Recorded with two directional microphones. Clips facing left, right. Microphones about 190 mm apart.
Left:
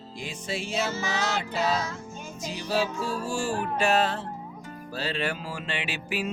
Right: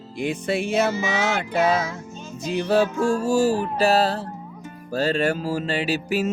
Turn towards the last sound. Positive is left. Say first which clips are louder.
# right 8 dB
turn(degrees=-40)  # may be behind; listen again after turning